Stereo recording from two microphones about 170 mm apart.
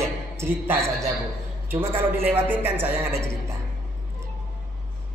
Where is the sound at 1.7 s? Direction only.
15° right (ahead or behind).